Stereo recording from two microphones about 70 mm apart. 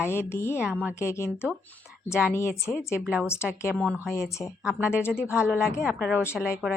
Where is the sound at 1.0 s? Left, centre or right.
Left.